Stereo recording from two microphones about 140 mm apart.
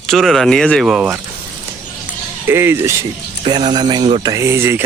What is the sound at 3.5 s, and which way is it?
Speech, 30° right (ahead or behind).